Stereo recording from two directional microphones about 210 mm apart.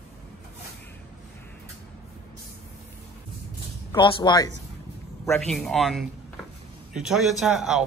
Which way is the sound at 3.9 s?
25° left (ahead or behind).